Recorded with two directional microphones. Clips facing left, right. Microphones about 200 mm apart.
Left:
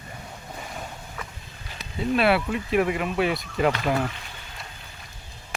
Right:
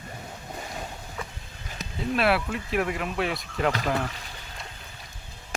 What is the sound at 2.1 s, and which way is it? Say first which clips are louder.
Speech: left 3 dB; centre (ahead or behind).